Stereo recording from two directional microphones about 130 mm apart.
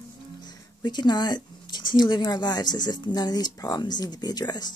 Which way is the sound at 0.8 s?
35° left (ahead or behind).